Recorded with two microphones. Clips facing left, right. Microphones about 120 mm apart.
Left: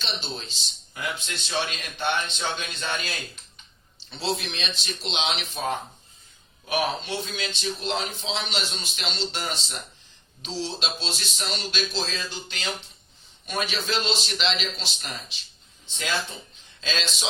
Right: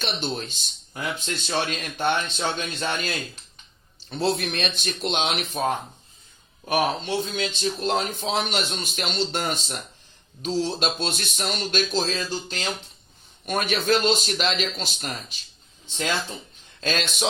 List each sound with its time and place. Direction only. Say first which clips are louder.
0.0 s speech: right 6 dB; 55° right (ahead or behind)
4.1 s speech: right 5 dB; 50° right (ahead or behind)
6.7 s speech: right 3 dB; 45° right (ahead or behind)
13.4 s speech: right 4 dB; 50° right (ahead or behind)
16.8 s speech: right 4 dB; 55° right (ahead or behind)